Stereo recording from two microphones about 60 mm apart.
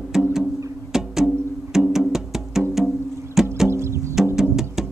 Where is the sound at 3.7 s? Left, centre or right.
Right.